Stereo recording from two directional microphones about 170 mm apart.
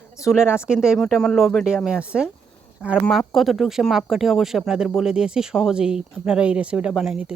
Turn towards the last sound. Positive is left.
turn(degrees=-5)  # may be behind; listen again after turning